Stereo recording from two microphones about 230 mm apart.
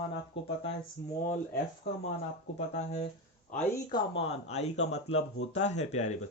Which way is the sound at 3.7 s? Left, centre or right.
Centre.